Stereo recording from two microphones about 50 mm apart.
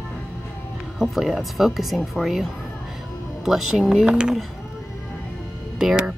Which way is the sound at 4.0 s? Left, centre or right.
Centre.